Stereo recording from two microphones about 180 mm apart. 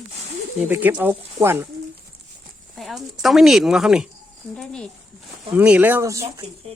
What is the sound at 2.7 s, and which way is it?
Speech, centre (ahead or behind).